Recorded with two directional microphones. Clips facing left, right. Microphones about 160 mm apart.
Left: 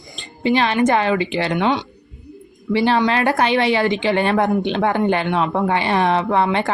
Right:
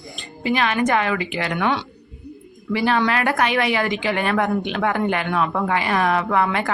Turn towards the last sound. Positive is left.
turn(degrees=30)  # may be behind; listen again after turning